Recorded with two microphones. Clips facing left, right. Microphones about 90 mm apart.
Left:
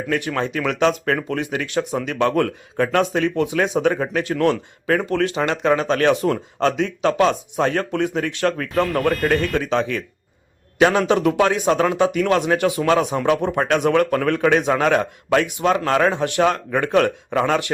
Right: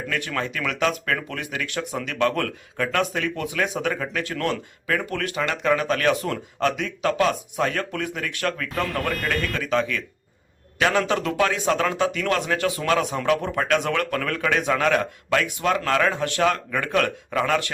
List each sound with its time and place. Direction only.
0.1 s a man's voice: 25° left (ahead or behind)
4.9 s a man's voice: 30° left (ahead or behind)
9.5 s a man's voice: 25° left (ahead or behind)